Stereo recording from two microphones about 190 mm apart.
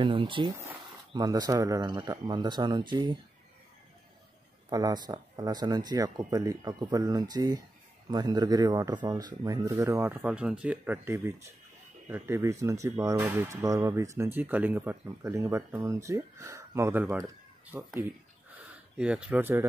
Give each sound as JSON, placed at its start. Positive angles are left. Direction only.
{"t": 0.0, "sound": "speech", "side_deg": -25}
{"t": 4.6, "sound": "speech", "side_deg": -20}
{"t": 18.9, "sound": "speech", "side_deg": -5}